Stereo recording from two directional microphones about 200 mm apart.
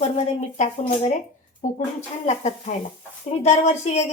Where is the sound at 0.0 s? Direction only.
35° left (ahead or behind).